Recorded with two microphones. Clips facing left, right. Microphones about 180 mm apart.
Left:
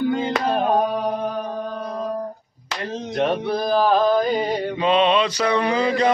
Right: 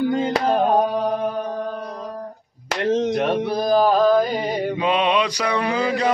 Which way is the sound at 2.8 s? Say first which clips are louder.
Right 10 dB; 85° right.